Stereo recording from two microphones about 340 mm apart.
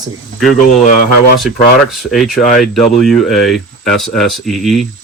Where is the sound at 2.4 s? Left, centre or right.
Left.